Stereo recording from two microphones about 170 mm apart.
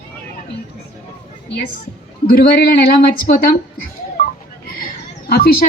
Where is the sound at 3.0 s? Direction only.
60° left (ahead or behind).